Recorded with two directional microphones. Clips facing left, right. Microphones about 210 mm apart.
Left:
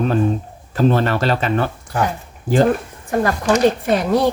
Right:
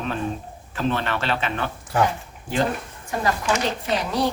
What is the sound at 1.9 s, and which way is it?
Speech, centre (ahead or behind).